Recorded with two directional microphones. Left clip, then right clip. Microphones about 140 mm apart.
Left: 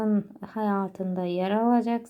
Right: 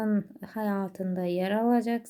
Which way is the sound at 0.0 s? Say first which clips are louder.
Left 3 dB; 30° right (ahead or behind).